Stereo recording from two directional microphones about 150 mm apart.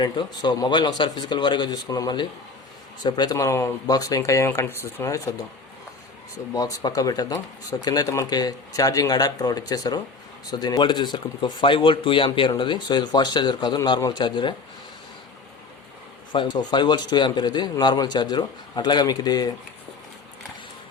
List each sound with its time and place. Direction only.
0.0 s speech: 30° left (ahead or behind)
6.5 s speech: 25° left (ahead or behind)
16.3 s speech: 30° left (ahead or behind)